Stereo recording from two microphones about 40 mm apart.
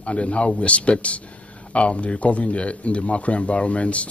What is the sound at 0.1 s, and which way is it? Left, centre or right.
A man's voice, left.